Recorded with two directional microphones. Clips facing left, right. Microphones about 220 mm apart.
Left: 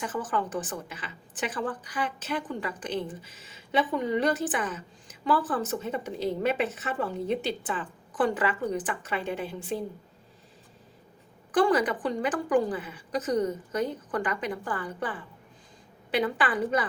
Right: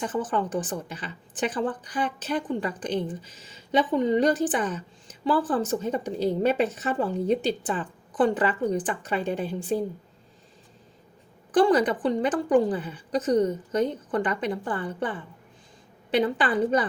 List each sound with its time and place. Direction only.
0.0 s a woman's voice: 30° right (ahead or behind)
11.5 s a woman's voice: 30° right (ahead or behind)
16.1 s a woman's voice: 30° right (ahead or behind)